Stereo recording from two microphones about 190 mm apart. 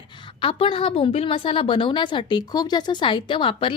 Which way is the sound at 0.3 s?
30° left (ahead or behind).